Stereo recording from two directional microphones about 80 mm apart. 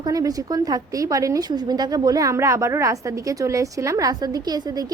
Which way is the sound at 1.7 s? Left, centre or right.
Right.